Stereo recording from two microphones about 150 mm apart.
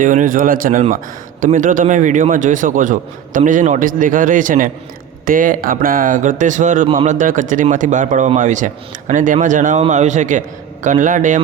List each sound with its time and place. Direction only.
0.0 s a man's voice: 60° right (ahead or behind)